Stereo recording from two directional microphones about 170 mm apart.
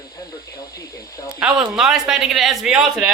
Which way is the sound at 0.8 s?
20° left (ahead or behind).